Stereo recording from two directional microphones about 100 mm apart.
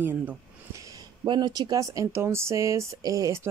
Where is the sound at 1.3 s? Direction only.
45° right (ahead or behind).